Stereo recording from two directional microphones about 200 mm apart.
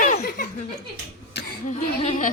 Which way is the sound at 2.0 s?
35° left (ahead or behind).